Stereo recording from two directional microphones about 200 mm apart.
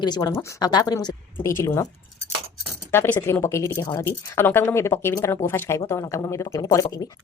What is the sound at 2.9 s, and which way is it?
Speech, 10° left (ahead or behind).